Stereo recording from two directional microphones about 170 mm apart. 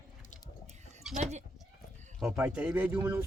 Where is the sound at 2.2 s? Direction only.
10° right (ahead or behind).